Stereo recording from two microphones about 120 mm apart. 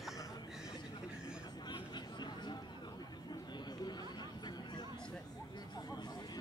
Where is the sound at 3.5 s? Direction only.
35° left (ahead or behind).